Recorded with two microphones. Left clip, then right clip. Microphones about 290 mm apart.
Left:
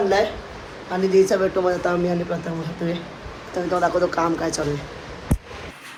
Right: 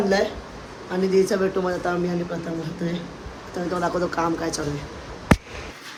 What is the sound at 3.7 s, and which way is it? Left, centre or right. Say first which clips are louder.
Speech: left 5 dB; centre.